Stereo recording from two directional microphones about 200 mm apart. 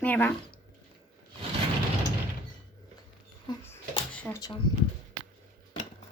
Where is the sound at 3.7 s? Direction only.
10° left (ahead or behind).